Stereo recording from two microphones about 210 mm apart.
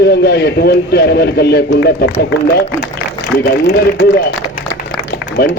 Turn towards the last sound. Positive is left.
turn(degrees=55)  # may be behind; listen again after turning